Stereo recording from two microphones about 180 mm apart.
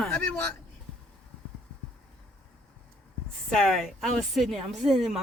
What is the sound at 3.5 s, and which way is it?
Speech, centre (ahead or behind).